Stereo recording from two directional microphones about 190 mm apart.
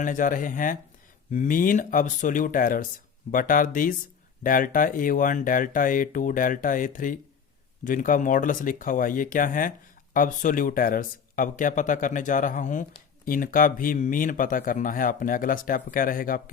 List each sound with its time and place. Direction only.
0.0 s speech: 45° left (ahead or behind)